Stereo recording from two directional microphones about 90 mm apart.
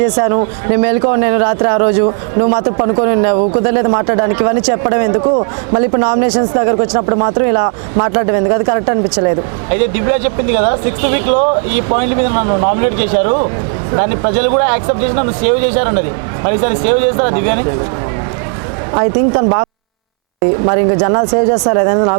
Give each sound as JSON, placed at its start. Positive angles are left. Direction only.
{"t": 0.0, "sound": "a man's voice", "side_deg": -30}
{"t": 5.2, "sound": "a man's voice", "side_deg": -35}
{"t": 5.8, "sound": "speech", "side_deg": -25}
{"t": 19.4, "sound": "speech", "side_deg": -30}
{"t": 20.7, "sound": "speech", "side_deg": -25}